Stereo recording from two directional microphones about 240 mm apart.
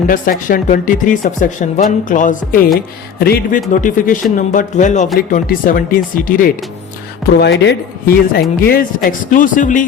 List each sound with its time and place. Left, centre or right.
0.1 s speech: left